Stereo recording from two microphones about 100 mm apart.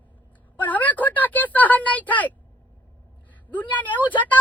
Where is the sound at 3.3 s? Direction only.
15° left (ahead or behind).